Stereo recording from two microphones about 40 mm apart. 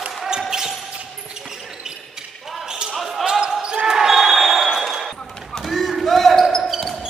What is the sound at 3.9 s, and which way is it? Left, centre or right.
Basketball bounce, centre.